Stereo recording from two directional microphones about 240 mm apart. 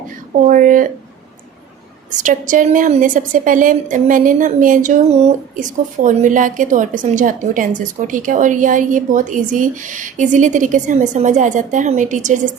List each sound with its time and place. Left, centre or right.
0.4 s a woman's voice: right
2.0 s a woman's voice: right